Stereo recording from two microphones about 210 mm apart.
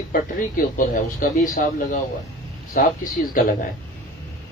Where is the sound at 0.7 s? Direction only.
40° left (ahead or behind).